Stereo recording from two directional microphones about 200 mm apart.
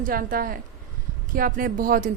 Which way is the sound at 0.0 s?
45° right (ahead or behind).